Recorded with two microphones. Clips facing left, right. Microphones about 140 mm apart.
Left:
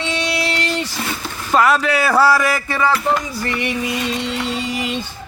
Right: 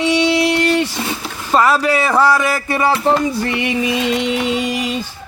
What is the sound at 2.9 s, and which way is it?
Music, 30° right (ahead or behind).